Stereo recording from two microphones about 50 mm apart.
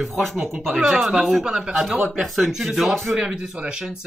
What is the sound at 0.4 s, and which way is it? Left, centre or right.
Speech, right.